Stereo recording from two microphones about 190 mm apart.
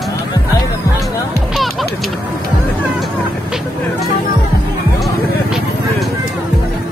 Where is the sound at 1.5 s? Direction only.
Centre (ahead or behind).